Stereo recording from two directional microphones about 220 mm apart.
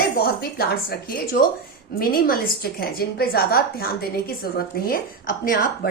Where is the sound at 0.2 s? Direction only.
45° left (ahead or behind).